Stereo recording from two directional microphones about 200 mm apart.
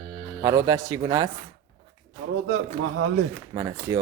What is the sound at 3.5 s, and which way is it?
Speech, 15° right (ahead or behind).